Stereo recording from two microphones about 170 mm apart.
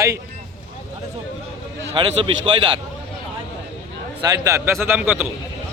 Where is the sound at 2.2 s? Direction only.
30° right (ahead or behind).